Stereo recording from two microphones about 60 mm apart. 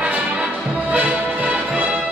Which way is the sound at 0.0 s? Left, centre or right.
Centre.